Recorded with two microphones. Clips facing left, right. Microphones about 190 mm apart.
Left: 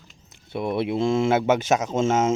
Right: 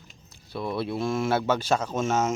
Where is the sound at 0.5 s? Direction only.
20° left (ahead or behind).